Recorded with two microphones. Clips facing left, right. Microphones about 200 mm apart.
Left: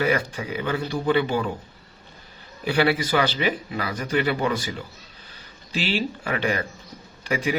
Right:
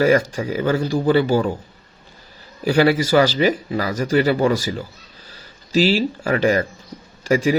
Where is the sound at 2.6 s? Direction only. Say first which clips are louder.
Right 6 dB; 40° right (ahead or behind).